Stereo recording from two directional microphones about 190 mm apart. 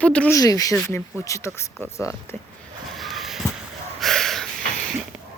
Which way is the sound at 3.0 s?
Centre (ahead or behind).